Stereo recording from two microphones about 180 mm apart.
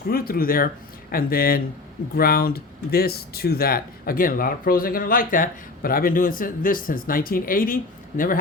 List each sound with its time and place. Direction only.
0.1 s speech: 55° left (ahead or behind)